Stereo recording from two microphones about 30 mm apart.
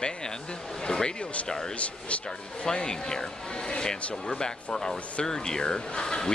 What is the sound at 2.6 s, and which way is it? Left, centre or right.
Speech, left.